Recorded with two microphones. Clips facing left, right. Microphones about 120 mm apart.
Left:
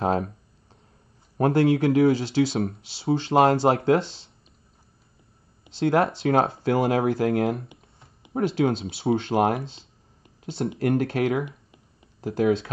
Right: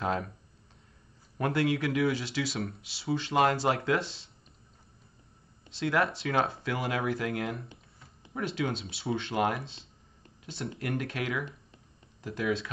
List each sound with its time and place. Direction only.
0.0 s speech: 35° left (ahead or behind)
1.4 s speech: 30° left (ahead or behind)
5.7 s speech: 30° left (ahead or behind)
7.6 s computer keyboard: 15° left (ahead or behind)
8.8 s speech: 30° left (ahead or behind)
9.3 s speech: 40° left (ahead or behind)
11.4 s a sound: 15° left (ahead or behind)
12.2 s speech: 40° left (ahead or behind)